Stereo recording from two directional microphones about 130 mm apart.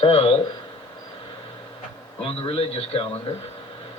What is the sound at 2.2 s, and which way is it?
Speech, 45° left (ahead or behind).